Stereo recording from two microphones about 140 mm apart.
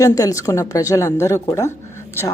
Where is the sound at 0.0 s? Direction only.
25° left (ahead or behind).